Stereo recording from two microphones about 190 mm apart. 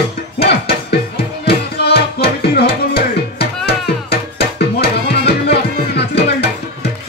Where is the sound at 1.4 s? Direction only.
60° left (ahead or behind).